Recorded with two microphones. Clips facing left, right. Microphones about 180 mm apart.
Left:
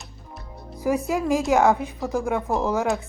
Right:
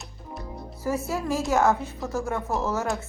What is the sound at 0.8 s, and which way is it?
A woman's voice, 15° left (ahead or behind).